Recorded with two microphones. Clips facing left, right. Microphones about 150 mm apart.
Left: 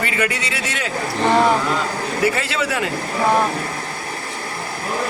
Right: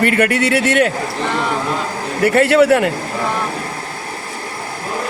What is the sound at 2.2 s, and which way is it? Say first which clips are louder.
Speech: right 11 dB; 60° right (ahead or behind).